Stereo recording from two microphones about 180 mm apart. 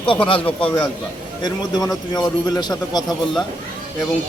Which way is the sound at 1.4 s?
25° left (ahead or behind).